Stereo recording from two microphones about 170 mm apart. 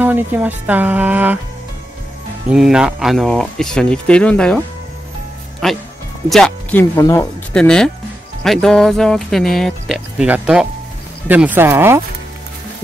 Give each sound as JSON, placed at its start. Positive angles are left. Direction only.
{"t": 0.0, "sound": "speech", "side_deg": -10}
{"t": 2.5, "sound": "speech", "side_deg": -5}
{"t": 5.6, "sound": "speech", "side_deg": 0}
{"t": 6.8, "sound": "speech", "side_deg": 15}
{"t": 7.5, "sound": "speech", "side_deg": 5}